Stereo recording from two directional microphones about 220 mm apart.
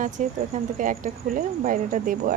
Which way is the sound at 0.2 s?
35° right (ahead or behind).